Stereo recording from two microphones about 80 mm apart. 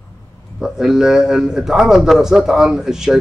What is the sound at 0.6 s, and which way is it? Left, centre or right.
A man's voice, centre.